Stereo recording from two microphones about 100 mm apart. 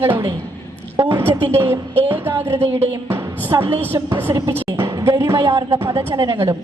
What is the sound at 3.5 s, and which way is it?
Speech, 25° right (ahead or behind).